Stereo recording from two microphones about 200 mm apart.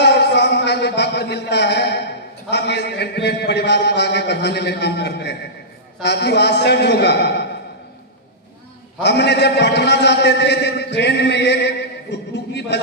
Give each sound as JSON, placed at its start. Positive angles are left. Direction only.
{"t": 0.0, "sound": "a sound", "side_deg": 55}
{"t": 6.0, "sound": "a man's voice", "side_deg": 55}
{"t": 9.0, "sound": "a man's voice", "side_deg": 55}